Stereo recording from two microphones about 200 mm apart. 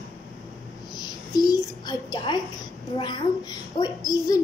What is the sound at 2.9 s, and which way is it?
Child singing, 20° left (ahead or behind).